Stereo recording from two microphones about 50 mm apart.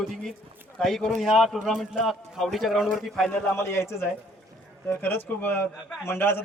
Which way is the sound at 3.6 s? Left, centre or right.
Left.